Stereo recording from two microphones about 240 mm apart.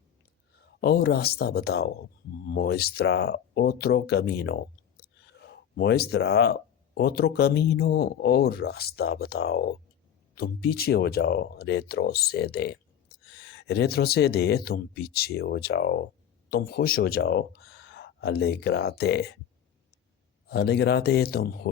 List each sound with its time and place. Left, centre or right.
0.5 s a man's voice: left
20.5 s speech: left